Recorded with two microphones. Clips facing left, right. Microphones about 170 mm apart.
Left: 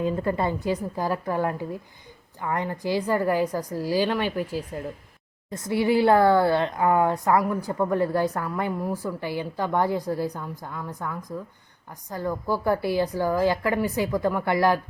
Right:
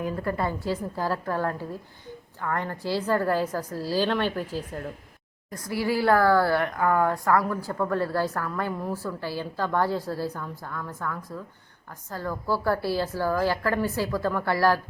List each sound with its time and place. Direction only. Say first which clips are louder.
0.0 s a woman's voice: left 3 dB; 20° left (ahead or behind)
5.5 s a woman's voice: left 4 dB; 25° left (ahead or behind)